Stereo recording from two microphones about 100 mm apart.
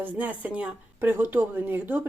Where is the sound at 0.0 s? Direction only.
15° right (ahead or behind).